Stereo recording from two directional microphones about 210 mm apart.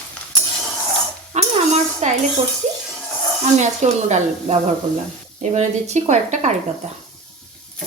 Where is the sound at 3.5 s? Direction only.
35° right (ahead or behind).